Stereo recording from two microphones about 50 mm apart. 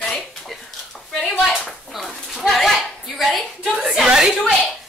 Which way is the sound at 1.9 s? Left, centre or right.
Centre.